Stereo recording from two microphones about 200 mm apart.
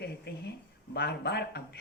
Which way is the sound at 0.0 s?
55° left (ahead or behind).